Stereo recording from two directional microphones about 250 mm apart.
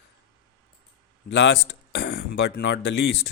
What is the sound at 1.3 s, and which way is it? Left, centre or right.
Speech, left.